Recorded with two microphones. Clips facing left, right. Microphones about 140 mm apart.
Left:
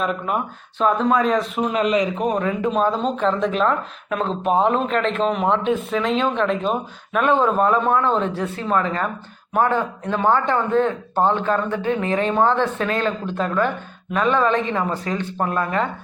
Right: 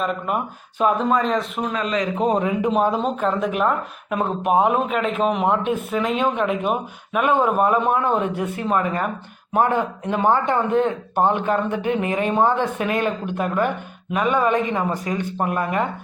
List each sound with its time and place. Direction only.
0.0 s speech: centre (ahead or behind)
1.7 s speech: 20° left (ahead or behind)
2.1 s a man's voice: 25° right (ahead or behind)
2.4 s speech: 15° right (ahead or behind)